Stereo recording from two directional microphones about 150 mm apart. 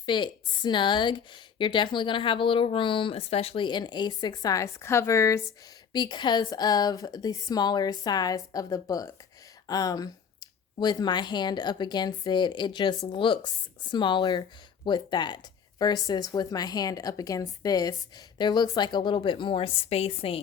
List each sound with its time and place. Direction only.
0.0 s a woman's voice: 30° left (ahead or behind)